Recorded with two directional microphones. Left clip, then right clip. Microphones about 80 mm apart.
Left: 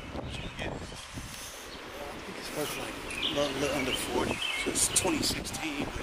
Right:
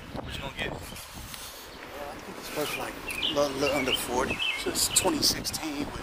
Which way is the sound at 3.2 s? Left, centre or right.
Right.